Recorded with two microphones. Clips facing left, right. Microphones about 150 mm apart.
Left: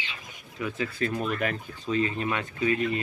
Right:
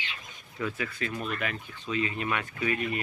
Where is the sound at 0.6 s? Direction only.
30° left (ahead or behind).